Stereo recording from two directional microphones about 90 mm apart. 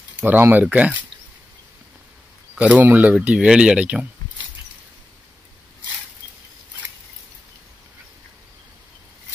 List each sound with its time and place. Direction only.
0.1 s speech: 20° right (ahead or behind)
2.5 s speech: 15° right (ahead or behind)